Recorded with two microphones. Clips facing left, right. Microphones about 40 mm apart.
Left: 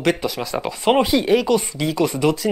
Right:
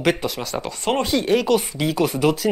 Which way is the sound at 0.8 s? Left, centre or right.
Centre.